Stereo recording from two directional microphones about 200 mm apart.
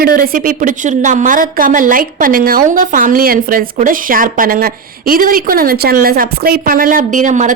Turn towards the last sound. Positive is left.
turn(degrees=-40)  # may be behind; listen again after turning